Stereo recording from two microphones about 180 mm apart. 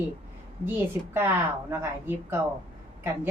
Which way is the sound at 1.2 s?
10° right (ahead or behind).